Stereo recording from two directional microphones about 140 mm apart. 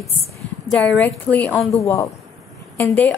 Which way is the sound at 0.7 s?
10° left (ahead or behind).